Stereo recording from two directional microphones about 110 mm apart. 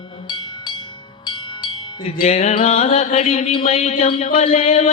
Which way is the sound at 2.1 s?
75° left (ahead or behind).